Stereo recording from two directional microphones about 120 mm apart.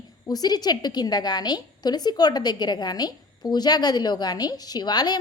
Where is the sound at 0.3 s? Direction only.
35° left (ahead or behind).